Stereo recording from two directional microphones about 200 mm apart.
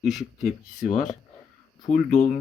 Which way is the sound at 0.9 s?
35° left (ahead or behind).